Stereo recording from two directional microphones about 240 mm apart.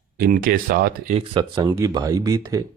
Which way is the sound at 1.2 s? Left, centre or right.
Centre.